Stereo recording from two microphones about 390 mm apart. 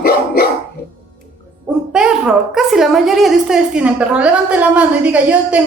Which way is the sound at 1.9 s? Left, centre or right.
Centre.